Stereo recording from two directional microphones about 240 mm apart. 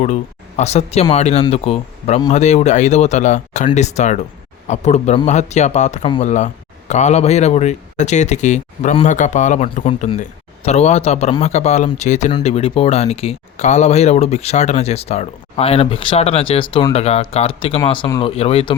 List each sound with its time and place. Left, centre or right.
0.0 s speech: left